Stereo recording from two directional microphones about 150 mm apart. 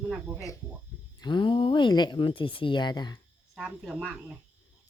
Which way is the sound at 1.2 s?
30° left (ahead or behind).